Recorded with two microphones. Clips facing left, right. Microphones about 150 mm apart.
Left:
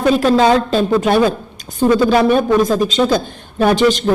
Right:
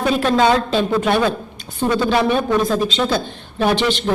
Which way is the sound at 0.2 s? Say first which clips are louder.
Left 3 dB; 40° left (ahead or behind).